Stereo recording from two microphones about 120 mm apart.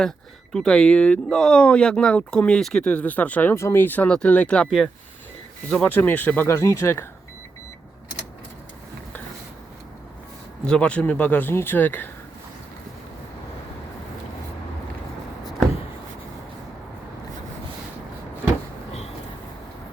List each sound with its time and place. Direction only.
0.5 s speech: 5° left (ahead or behind)
5.7 s speech: 10° left (ahead or behind)
10.7 s speech: 10° left (ahead or behind)
18.9 s vehicle: 60° left (ahead or behind)